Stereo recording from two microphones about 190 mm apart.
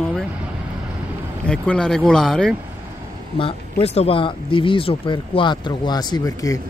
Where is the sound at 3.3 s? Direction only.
30° left (ahead or behind).